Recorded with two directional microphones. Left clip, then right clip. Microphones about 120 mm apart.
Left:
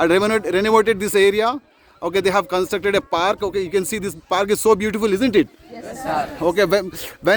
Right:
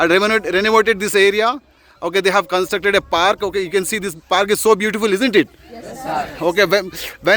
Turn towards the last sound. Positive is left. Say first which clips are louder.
# right 2 dB
turn(degrees=35)  # may be behind; listen again after turning